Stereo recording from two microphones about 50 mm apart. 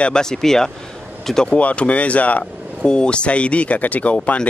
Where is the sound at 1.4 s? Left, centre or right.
Left.